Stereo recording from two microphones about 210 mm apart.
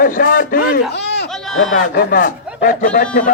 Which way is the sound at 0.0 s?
40° left (ahead or behind).